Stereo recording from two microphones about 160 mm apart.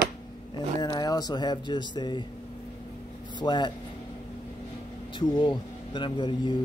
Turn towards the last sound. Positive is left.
turn(degrees=30)  # may be behind; listen again after turning